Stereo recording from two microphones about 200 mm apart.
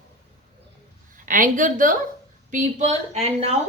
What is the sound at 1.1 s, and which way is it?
A woman's voice, 40° right (ahead or behind).